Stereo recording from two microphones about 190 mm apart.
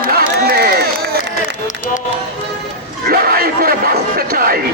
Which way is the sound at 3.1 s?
50° right (ahead or behind).